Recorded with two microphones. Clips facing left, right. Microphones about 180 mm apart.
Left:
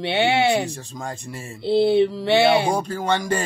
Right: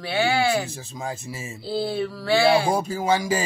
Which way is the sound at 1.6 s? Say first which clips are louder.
Left 9 dB; 25° left (ahead or behind).